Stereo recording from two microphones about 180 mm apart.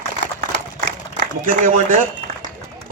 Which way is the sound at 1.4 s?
45° right (ahead or behind).